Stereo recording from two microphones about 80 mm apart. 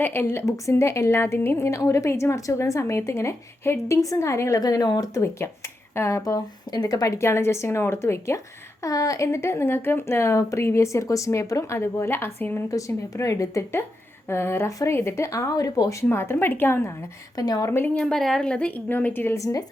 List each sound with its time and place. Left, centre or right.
0.0 s a woman's voice: left
0.4 s a woman's voice: left
4.6 s speech: left
5.2 s a woman's voice: left
7.2 s a woman's voice: left
12.7 s a woman's voice: left
14.7 s speech: left
14.9 s a woman's voice: left
16.0 s a woman's voice: left
17.3 s speech: left
17.7 s a woman's voice: left
17.9 s a woman's voice: centre
18.7 s a woman's voice: left
19.4 s speech: left